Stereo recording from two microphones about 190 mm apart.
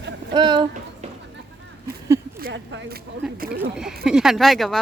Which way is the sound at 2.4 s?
60° right (ahead or behind).